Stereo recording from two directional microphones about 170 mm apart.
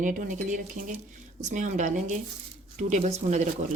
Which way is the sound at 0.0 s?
50° right (ahead or behind).